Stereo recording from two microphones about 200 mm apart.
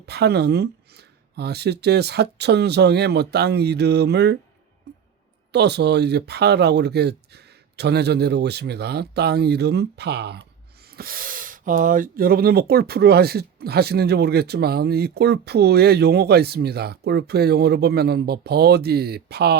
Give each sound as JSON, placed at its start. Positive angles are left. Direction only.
{"t": 0.0, "sound": "speech", "side_deg": -55}
{"t": 5.5, "sound": "speech", "side_deg": -55}